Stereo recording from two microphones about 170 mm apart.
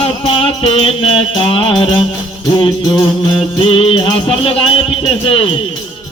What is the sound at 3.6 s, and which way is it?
Speech, 35° left (ahead or behind).